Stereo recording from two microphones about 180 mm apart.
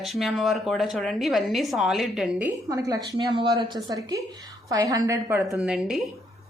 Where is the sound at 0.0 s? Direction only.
Centre (ahead or behind).